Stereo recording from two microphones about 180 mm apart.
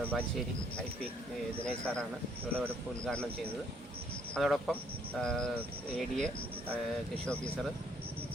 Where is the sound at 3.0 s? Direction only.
5° left (ahead or behind).